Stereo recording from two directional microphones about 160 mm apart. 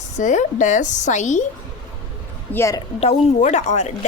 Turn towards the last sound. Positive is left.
turn(degrees=45)  # may be behind; listen again after turning